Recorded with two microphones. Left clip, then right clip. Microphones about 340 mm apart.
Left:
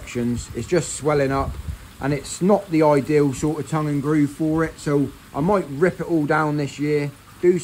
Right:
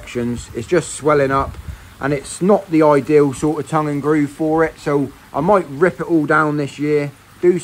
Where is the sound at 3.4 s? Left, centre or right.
Right.